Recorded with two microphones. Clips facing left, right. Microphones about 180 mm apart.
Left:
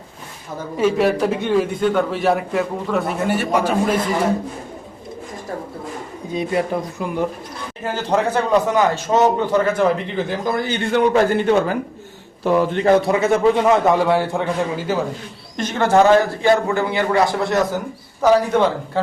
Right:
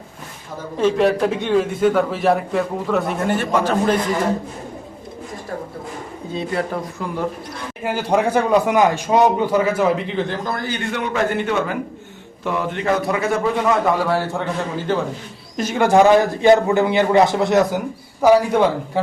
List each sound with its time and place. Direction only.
0.8 s a man's voice: 5° left (ahead or behind)
3.3 s speech: 10° left (ahead or behind)
6.3 s speech: 15° left (ahead or behind)
7.9 s a man's voice: 10° right (ahead or behind)
10.4 s speech: 20° left (ahead or behind)
10.9 s a man's voice: 35° left (ahead or behind); by 14.9 s 15° left (ahead or behind)
15.5 s a man's voice: 10° right (ahead or behind)